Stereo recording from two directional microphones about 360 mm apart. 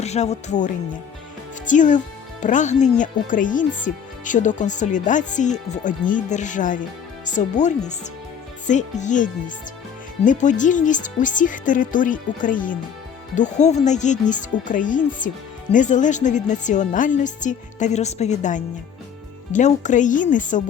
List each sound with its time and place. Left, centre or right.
0.0 s speech: centre